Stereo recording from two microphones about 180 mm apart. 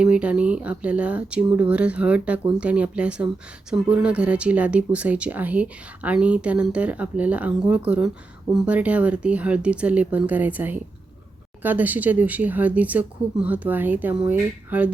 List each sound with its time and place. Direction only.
0.0 s speech: 5° right (ahead or behind)